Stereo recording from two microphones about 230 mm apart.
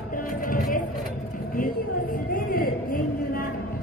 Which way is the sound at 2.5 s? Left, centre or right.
Left.